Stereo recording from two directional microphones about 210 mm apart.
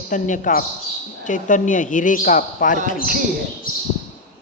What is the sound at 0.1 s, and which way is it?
A man's voice, 40° left (ahead or behind).